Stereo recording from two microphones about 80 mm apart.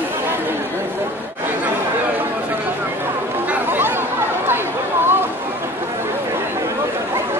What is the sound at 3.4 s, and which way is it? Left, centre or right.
Chatter, right.